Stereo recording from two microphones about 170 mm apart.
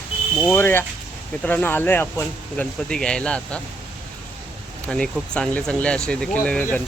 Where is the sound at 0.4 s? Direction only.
10° left (ahead or behind).